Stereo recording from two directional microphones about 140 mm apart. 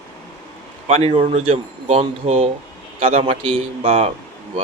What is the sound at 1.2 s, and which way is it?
A man's voice, 55° right (ahead or behind).